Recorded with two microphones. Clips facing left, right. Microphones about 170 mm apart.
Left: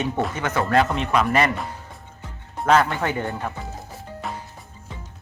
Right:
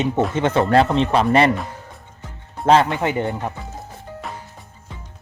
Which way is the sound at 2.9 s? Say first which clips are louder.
Right 4 dB; 20° right (ahead or behind).